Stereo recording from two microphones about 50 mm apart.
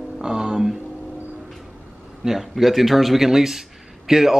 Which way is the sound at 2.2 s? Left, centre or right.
Centre.